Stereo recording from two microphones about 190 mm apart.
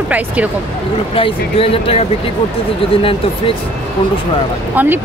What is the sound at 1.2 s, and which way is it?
Speech, 30° left (ahead or behind).